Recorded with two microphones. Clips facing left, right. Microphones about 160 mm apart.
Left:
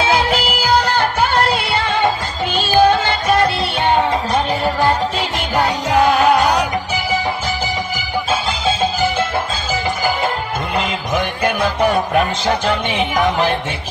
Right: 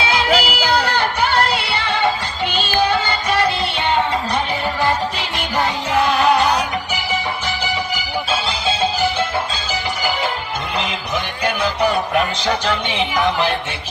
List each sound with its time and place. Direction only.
0.0 s music: 45° left (ahead or behind)
5.9 s music: 45° left (ahead or behind)
8.3 s music: 50° left (ahead or behind)
10.8 s music: 50° left (ahead or behind)